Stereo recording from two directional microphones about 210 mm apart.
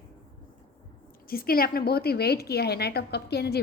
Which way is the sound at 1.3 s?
45° left (ahead or behind).